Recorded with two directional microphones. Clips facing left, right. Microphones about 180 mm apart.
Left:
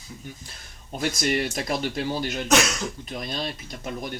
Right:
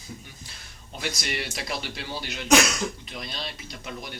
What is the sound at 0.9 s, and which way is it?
Speech, 45° left (ahead or behind).